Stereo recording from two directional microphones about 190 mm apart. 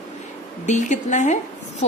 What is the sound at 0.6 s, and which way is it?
Speech, 40° left (ahead or behind).